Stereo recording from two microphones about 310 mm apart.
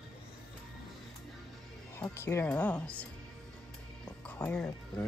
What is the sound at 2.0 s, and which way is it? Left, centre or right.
Speech, centre.